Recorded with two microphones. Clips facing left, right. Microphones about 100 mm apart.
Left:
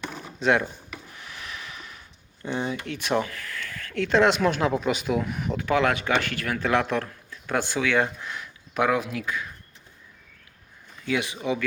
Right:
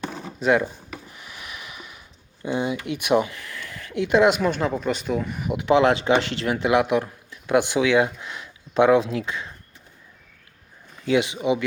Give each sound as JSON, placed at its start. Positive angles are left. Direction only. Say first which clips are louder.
{"t": 0.3, "sound": "speech", "louder": "right 2 dB", "side_deg": -5}
{"t": 1.1, "sound": "a sound", "louder": "even", "side_deg": -5}
{"t": 2.4, "sound": "speech", "louder": "right 4 dB", "side_deg": -10}
{"t": 5.5, "sound": "speech", "louder": "right 6 dB", "side_deg": -20}
{"t": 11.0, "sound": "speech", "louder": "right 6 dB", "side_deg": -25}